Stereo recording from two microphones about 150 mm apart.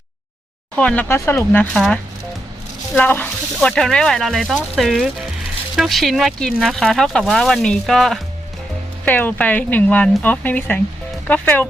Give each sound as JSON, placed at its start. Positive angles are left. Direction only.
{"t": 0.8, "sound": "speech", "side_deg": 10}
{"t": 1.7, "sound": "speech", "side_deg": 5}